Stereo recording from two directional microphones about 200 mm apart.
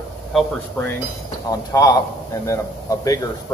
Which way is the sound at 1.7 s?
15° left (ahead or behind).